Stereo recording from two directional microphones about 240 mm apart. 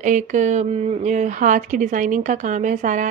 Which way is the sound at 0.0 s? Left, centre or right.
Right.